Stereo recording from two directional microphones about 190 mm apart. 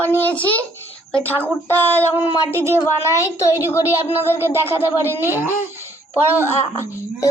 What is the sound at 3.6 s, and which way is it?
Speech, 10° right (ahead or behind).